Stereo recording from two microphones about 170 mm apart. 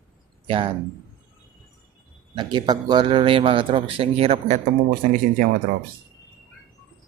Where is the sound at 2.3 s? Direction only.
25° right (ahead or behind); by 4.7 s 45° right (ahead or behind).